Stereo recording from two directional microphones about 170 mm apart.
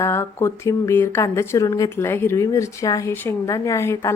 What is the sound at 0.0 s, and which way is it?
A woman's voice, 15° left (ahead or behind).